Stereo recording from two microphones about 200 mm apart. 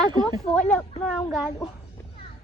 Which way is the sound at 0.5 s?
5° left (ahead or behind).